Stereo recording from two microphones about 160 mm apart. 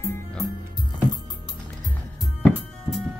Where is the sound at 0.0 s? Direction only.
15° left (ahead or behind).